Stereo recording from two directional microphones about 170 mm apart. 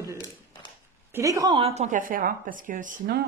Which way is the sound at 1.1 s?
15° right (ahead or behind).